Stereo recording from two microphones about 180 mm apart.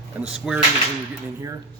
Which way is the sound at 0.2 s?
5° right (ahead or behind).